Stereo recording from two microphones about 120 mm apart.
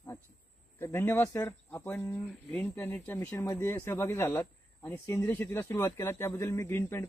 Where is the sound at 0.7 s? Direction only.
20° left (ahead or behind).